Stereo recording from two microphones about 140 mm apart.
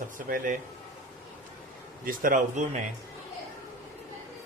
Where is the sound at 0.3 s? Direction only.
80° right.